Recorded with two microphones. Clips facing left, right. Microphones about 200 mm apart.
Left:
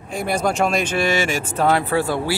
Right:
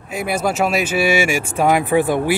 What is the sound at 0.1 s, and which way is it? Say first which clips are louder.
Speech: right 1 dB; 5° right (ahead or behind).